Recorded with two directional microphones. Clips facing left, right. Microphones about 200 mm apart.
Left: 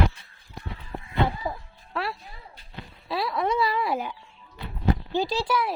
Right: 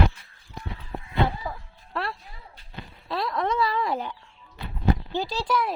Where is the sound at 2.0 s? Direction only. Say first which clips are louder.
Left 1 dB; centre (ahead or behind).